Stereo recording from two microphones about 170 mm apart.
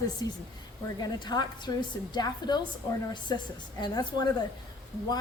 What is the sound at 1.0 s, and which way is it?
Speech, 25° left (ahead or behind).